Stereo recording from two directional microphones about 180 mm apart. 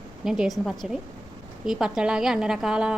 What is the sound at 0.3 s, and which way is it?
A woman's voice, centre (ahead or behind).